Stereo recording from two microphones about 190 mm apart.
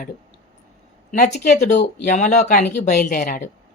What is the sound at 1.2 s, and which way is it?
Speech, 45° left (ahead or behind).